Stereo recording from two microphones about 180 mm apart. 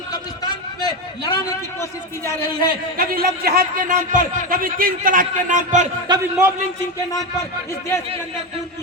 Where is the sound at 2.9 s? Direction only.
55° right (ahead or behind).